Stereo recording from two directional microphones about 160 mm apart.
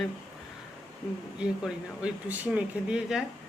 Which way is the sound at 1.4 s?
5° right (ahead or behind).